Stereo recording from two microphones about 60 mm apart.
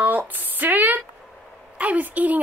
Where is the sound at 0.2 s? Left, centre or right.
Right.